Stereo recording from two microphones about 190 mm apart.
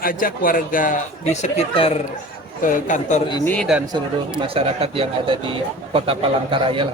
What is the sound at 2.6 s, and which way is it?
Speech, 45° left (ahead or behind).